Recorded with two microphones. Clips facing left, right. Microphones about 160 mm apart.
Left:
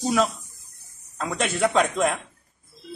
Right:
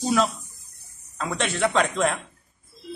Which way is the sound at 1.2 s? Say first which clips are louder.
Left 1 dB; 5° left (ahead or behind).